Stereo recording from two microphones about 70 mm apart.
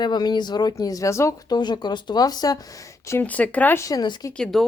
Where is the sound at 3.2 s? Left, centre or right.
Left.